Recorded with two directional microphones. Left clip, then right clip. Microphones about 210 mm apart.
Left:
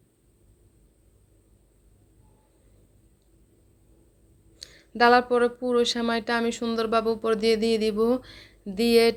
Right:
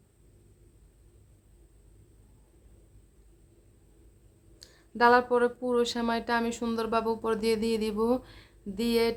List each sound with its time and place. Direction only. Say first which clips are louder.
4.6 s speech: left 3 dB; 10° left (ahead or behind)